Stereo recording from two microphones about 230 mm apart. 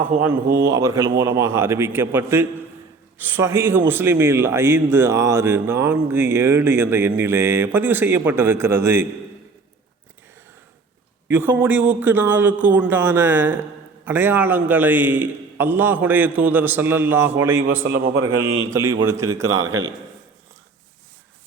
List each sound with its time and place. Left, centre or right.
0.5 s speech: centre
11.3 s speech: centre
17.8 s a man's voice: right
18.3 s speech: centre
19.5 s a man's voice: right